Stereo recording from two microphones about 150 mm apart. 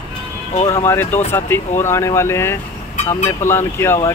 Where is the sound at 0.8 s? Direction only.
15° left (ahead or behind).